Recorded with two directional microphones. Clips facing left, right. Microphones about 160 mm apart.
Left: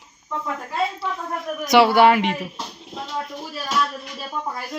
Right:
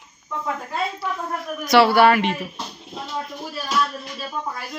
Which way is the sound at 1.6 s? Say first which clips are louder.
Even; 20° left (ahead or behind).